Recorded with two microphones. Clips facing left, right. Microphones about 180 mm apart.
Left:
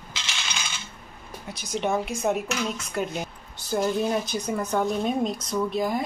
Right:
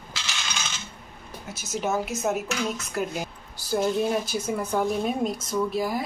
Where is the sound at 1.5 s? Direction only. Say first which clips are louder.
Left 1 dB; 5° right (ahead or behind).